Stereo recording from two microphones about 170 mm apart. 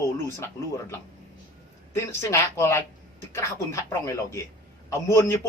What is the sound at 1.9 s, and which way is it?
A man's voice, 15° left (ahead or behind).